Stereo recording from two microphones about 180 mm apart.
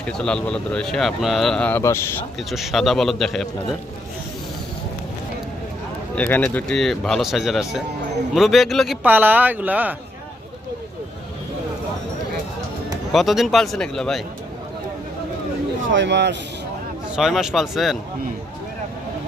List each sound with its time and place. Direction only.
0.0 s speech: 5° left (ahead or behind)
2.5 s speech: centre (ahead or behind)
6.1 s speech: 10° left (ahead or behind)
9.0 s speech: 10° right (ahead or behind)
13.1 s speech: centre (ahead or behind)
15.9 s speech: 80° right
17.1 s speech: 5° right (ahead or behind)